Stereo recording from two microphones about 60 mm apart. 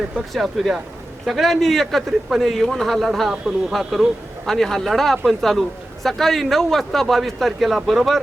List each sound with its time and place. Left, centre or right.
0.2 s speech: centre